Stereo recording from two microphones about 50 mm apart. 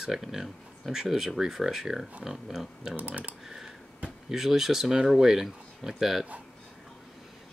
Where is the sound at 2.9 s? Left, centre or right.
Right.